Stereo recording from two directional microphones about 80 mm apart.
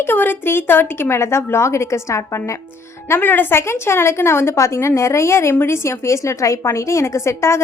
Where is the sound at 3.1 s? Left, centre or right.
Left.